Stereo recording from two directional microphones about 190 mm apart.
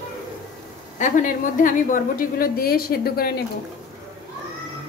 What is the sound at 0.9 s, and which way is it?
A woman's voice, 40° left (ahead or behind).